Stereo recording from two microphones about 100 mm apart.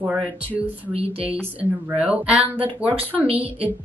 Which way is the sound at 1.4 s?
20° right (ahead or behind).